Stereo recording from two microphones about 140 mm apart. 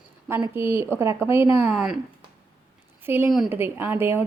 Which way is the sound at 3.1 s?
15° right (ahead or behind).